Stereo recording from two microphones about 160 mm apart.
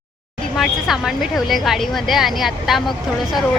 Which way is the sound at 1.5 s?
Centre (ahead or behind).